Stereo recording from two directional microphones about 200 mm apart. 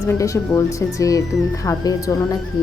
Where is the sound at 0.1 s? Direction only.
15° left (ahead or behind).